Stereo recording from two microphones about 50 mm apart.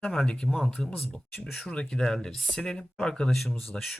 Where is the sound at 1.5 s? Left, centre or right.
Centre.